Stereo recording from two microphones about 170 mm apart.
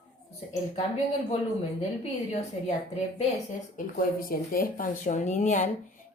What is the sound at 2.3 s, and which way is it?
Speech, 40° left (ahead or behind).